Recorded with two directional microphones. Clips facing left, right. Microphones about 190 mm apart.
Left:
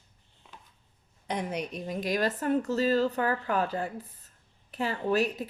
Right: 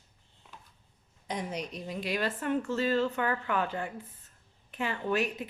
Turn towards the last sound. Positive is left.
turn(degrees=35)  # may be behind; listen again after turning